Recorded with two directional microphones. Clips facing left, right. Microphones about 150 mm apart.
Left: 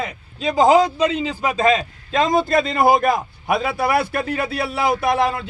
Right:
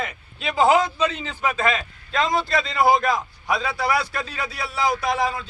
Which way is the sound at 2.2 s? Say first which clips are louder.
Left 5 dB; 45° left (ahead or behind).